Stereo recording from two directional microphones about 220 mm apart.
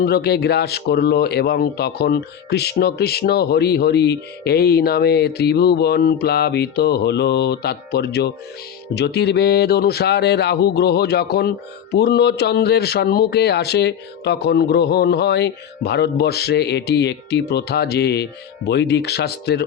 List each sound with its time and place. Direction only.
0.0 s speech: 45° left (ahead or behind)